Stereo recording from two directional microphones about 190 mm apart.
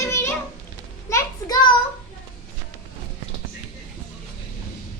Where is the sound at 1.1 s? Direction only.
20° left (ahead or behind).